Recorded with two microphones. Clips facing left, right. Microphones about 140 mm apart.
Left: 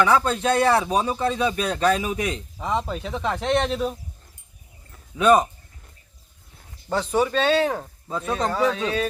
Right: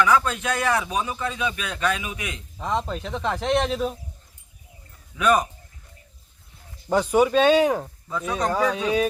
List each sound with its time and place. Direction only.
0.0 s speech: 30° left (ahead or behind)
2.6 s speech: 5° left (ahead or behind)
5.1 s speech: 25° left (ahead or behind)
6.8 s speech: 10° right (ahead or behind)